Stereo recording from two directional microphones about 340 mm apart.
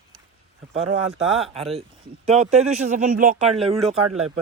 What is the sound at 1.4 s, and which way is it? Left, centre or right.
Speech, centre.